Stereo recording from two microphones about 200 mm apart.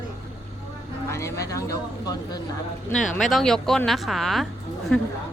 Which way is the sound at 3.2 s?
Centre (ahead or behind).